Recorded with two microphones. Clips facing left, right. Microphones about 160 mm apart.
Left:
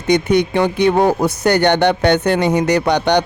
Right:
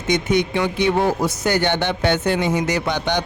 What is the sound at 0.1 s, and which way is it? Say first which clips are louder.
A man's voice: left 5 dB; 60° left (ahead or behind).